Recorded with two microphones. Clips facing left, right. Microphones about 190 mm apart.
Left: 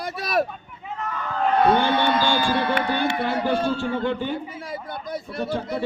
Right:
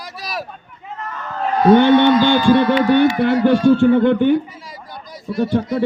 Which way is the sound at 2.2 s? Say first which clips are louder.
Right 9 dB; 60° right (ahead or behind).